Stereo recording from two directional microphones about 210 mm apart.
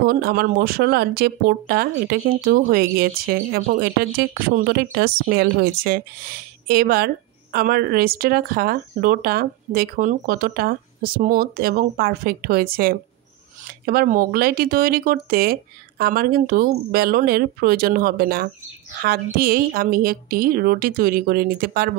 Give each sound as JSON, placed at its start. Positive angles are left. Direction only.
{"t": 0.0, "sound": "speech", "side_deg": -45}